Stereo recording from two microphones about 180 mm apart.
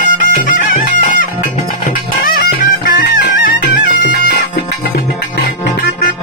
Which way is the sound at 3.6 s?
65° left (ahead or behind).